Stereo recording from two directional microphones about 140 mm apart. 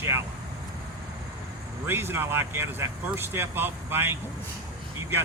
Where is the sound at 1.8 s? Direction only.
15° right (ahead or behind).